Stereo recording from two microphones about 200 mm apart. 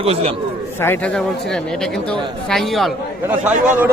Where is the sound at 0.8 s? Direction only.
10° left (ahead or behind).